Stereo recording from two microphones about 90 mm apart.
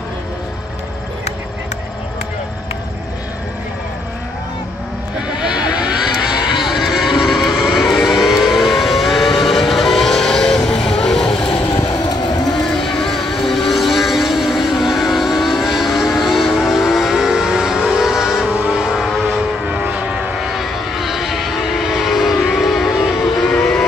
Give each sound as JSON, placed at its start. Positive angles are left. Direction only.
{"t": 5.6, "sound": "vehicle", "side_deg": -10}
{"t": 11.9, "sound": "vehicle", "side_deg": 45}
{"t": 12.4, "sound": "vehicle", "side_deg": 5}
{"t": 19.7, "sound": "vehicle", "side_deg": -10}
{"t": 21.9, "sound": "a sound", "side_deg": -5}